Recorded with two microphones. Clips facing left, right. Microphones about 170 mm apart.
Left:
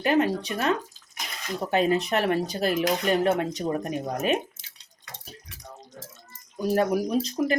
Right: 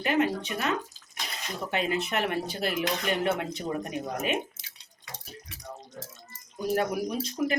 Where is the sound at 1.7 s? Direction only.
40° left (ahead or behind).